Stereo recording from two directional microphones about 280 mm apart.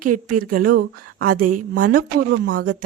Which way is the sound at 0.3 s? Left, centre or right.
Right.